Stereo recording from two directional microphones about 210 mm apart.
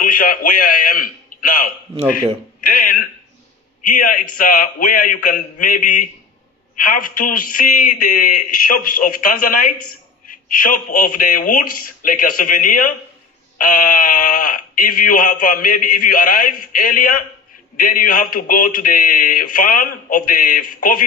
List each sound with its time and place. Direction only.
0.0 s a man's voice: 40° left (ahead or behind)